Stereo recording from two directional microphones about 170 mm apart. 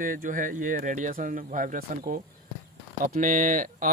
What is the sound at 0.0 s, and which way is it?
Speech, 55° right (ahead or behind).